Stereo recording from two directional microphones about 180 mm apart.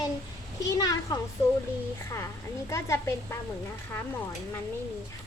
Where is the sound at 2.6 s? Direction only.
15° left (ahead or behind).